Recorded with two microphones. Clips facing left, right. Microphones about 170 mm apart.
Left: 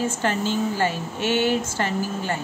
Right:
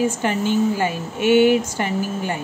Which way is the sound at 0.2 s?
15° right (ahead or behind).